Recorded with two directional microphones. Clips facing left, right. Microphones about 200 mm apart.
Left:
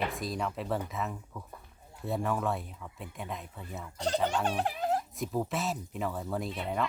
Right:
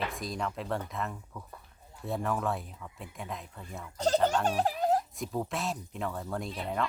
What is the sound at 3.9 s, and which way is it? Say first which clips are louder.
Fowl: right 4 dB; 40° right (ahead or behind).